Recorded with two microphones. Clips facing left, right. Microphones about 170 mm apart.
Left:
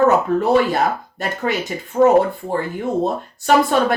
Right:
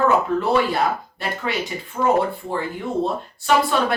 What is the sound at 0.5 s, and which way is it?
Speech, 45° left (ahead or behind).